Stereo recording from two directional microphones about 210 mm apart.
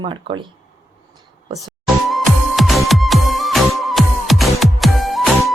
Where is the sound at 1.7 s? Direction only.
Centre (ahead or behind).